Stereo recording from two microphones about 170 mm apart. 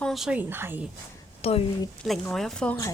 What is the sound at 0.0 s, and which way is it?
Speech, centre (ahead or behind).